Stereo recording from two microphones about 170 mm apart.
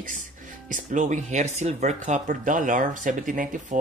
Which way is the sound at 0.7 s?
50° right (ahead or behind).